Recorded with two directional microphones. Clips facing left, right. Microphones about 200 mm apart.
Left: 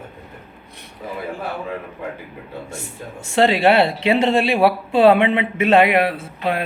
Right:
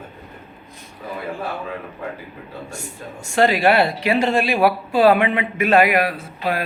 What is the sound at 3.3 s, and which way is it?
Speech, 25° left (ahead or behind).